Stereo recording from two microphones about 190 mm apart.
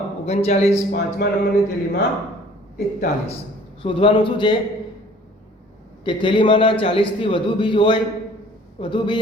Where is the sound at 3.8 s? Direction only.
25° left (ahead or behind).